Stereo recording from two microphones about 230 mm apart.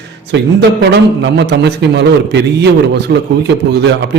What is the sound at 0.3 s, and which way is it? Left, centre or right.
A man's voice, right.